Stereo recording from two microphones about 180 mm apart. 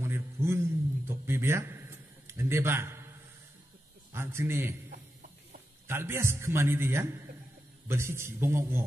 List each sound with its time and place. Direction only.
0.0 s a sound: 15° right (ahead or behind)
4.1 s a man's voice: 15° right (ahead or behind)
5.9 s a man's voice: 15° right (ahead or behind)